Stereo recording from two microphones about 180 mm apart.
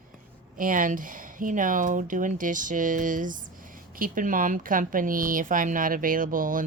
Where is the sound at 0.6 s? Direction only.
50° right (ahead or behind).